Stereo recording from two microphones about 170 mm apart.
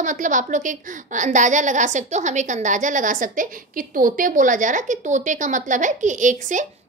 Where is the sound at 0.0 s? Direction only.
50° right (ahead or behind).